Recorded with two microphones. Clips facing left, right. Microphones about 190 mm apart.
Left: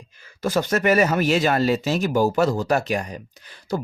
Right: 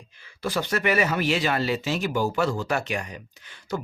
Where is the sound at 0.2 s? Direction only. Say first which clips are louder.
Left 5 dB; 45° left (ahead or behind).